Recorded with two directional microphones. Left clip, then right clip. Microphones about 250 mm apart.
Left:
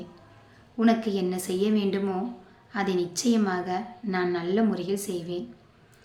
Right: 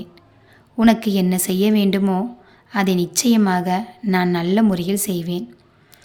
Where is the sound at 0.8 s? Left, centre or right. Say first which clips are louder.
Right 7 dB; right.